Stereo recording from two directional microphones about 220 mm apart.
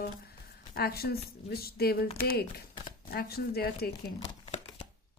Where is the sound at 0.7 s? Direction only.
45° left (ahead or behind).